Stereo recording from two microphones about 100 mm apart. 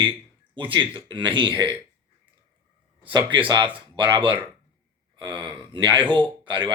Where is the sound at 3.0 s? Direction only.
50° right (ahead or behind).